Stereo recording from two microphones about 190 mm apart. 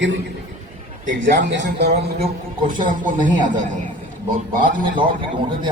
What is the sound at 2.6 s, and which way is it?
A man's voice, 45° right (ahead or behind).